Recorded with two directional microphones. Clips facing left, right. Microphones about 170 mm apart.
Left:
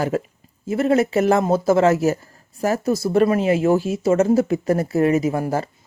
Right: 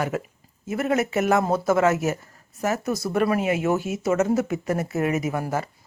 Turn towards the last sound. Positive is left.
turn(degrees=30)  # may be behind; listen again after turning